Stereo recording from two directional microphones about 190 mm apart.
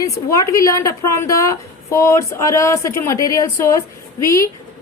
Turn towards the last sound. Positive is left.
turn(degrees=15)  # may be behind; listen again after turning